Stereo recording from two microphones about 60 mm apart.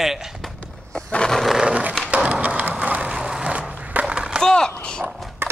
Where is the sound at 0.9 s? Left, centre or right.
Centre.